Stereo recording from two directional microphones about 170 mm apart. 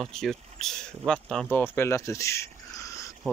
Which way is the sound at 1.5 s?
10° left (ahead or behind).